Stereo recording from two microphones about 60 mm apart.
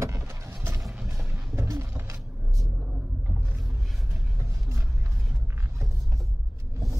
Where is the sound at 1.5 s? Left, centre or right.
Right.